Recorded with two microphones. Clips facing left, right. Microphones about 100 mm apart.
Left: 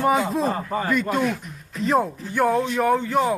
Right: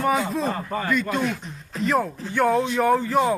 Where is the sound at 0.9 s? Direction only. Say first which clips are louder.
Left 1 dB; 45° left (ahead or behind).